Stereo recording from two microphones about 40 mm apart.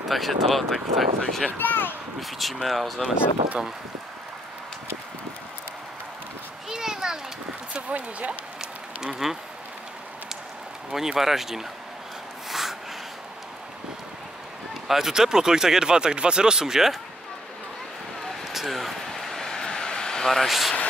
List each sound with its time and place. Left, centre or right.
0.1 s speech: centre
1.6 s speech: left
2.1 s speech: centre
6.7 s children playing: centre
7.7 s speech: right
8.5 s a sound: centre
10.9 s speech: centre
12.4 s a sound: centre
14.9 s speech: centre
18.4 s a sound: centre
19.1 s vehicle: centre
19.5 s vehicle: centre
20.4 s speech: centre